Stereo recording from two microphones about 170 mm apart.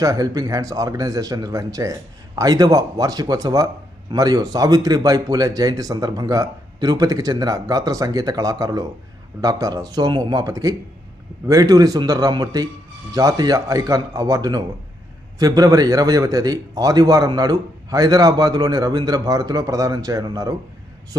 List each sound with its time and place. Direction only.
0.0 s a man's voice: 20° right (ahead or behind)